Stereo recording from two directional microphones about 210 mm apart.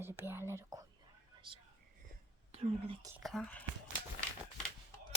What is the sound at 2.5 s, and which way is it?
Speech, 25° right (ahead or behind).